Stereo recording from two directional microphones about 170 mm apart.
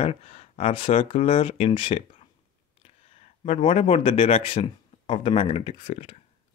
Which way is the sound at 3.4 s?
35° left (ahead or behind).